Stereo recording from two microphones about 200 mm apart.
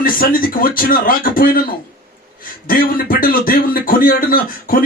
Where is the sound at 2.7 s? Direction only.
45° left (ahead or behind).